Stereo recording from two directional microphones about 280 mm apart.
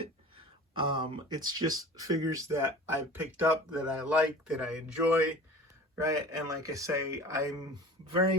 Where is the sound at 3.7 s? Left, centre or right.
Centre.